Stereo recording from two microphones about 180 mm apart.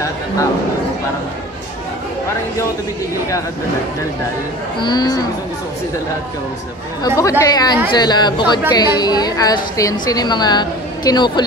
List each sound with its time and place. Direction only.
4.7 s speech: 25° left (ahead or behind)
7.0 s speech: 20° left (ahead or behind)